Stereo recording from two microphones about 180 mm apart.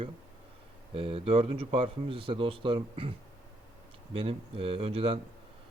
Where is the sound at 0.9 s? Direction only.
30° right (ahead or behind).